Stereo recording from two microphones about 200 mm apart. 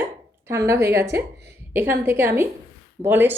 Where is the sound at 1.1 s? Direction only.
55° right (ahead or behind).